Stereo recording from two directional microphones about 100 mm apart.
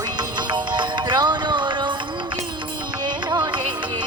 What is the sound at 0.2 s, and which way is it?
Music, 45° right (ahead or behind).